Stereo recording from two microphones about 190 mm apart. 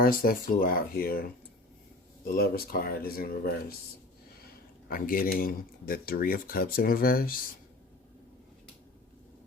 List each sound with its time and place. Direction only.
0.0 s speech: 50° left (ahead or behind)
2.2 s speech: 50° left (ahead or behind)
4.9 s speech: 50° left (ahead or behind)